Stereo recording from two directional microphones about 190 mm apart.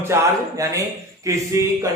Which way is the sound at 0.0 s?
15° right (ahead or behind).